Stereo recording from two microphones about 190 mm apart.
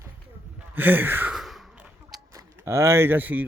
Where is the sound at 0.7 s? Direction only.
10° right (ahead or behind).